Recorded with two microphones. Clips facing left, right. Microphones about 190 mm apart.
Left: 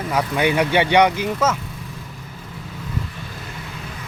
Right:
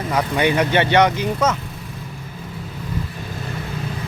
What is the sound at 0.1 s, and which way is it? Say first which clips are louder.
Speech: right 1 dB; 10° left (ahead or behind).